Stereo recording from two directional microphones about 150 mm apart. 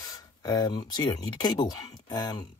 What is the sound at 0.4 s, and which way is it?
Speech, 25° left (ahead or behind).